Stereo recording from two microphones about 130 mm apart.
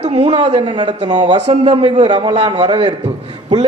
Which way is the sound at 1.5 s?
50° right (ahead or behind).